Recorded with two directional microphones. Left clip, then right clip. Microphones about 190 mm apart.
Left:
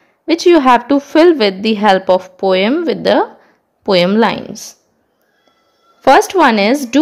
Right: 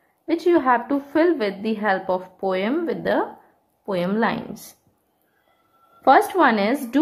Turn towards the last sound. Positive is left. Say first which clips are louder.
# left 8 dB
turn(degrees=40)  # may be behind; listen again after turning